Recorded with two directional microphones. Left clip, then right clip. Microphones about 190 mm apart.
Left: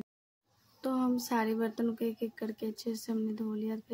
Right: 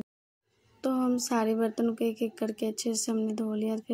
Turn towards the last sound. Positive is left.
turn(degrees=-10)  # may be behind; listen again after turning